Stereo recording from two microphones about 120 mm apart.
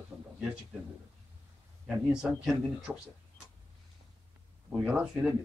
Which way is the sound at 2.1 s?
5° right (ahead or behind).